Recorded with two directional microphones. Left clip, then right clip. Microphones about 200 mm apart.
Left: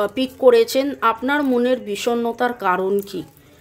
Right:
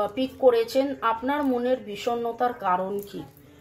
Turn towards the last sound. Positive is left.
turn(degrees=55)  # may be behind; listen again after turning